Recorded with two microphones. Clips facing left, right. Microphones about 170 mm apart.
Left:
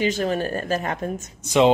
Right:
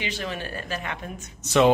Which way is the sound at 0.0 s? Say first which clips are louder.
Left 9 dB; 40° left (ahead or behind).